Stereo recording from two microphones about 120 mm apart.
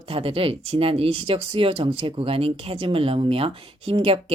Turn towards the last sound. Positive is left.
turn(degrees=-50)  # may be behind; listen again after turning